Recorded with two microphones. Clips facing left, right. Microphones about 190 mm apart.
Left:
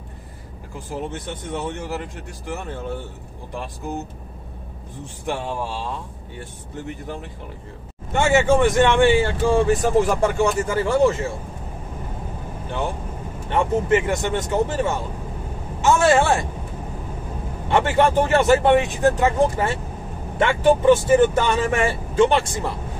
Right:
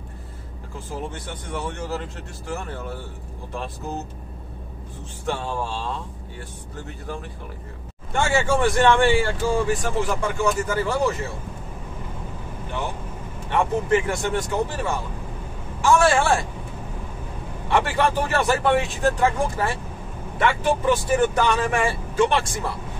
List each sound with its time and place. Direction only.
0.7 s speech: 15° left (ahead or behind)
5.2 s speech: 15° left (ahead or behind)
6.9 s speech: 20° left (ahead or behind)
9.7 s speech: 35° left (ahead or behind)
13.5 s speech: 20° left (ahead or behind)
17.6 s speech: 25° left (ahead or behind)